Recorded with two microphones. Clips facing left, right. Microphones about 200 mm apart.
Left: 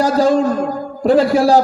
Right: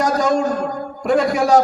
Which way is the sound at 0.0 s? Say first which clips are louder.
Left 4 dB; 30° left (ahead or behind).